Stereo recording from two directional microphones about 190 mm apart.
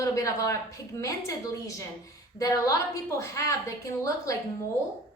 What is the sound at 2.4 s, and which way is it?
A woman's voice, 15° left (ahead or behind).